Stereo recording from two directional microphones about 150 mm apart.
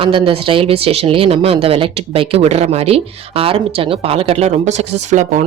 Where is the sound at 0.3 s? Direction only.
35° right (ahead or behind).